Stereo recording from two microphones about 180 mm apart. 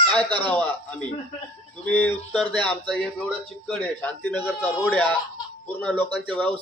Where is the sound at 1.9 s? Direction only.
10° left (ahead or behind).